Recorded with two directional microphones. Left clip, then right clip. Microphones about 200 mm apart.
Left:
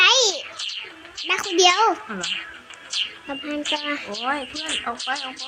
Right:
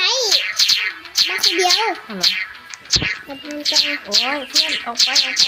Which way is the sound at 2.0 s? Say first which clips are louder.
Right 10 dB; 55° right (ahead or behind).